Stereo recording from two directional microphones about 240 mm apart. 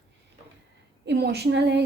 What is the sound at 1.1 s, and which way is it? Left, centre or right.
Speech, right.